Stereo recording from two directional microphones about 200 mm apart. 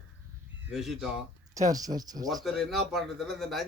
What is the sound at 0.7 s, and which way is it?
Speech, centre (ahead or behind).